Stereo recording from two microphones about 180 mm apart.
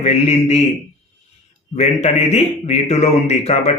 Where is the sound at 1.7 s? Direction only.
35° left (ahead or behind).